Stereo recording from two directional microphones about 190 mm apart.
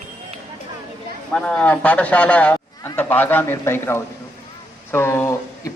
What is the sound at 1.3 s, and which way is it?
A man's voice, 5° left (ahead or behind).